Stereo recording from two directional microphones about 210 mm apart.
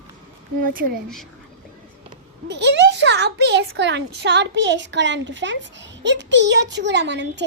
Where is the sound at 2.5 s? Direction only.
55° right (ahead or behind).